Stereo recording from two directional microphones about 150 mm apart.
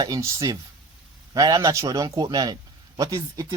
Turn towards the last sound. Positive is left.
turn(degrees=-25)  # may be behind; listen again after turning